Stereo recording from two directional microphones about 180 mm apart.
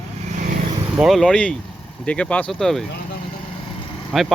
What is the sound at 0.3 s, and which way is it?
Vehicle, 45° right (ahead or behind).